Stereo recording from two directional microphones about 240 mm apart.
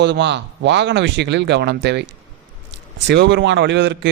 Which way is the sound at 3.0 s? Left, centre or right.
Right.